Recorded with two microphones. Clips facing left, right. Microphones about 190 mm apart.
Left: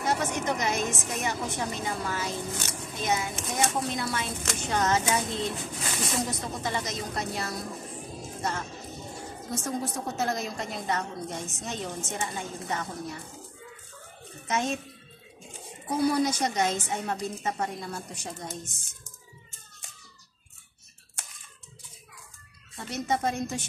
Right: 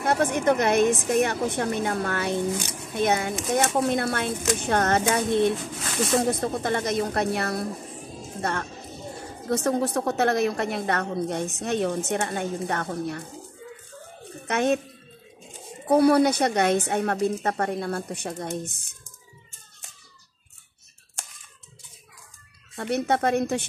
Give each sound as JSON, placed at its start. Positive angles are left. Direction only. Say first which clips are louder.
{"t": 0.0, "sound": "a woman's voice", "louder": "right 6 dB", "side_deg": -55}
{"t": 14.5, "sound": "a woman's voice", "louder": "right 6 dB", "side_deg": -65}
{"t": 15.9, "sound": "a woman's voice", "louder": "right 7 dB", "side_deg": -65}
{"t": 22.8, "sound": "a woman's voice", "louder": "right 6 dB", "side_deg": -60}